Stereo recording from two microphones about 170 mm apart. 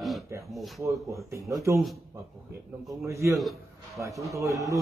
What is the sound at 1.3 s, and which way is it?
Speech, 20° right (ahead or behind).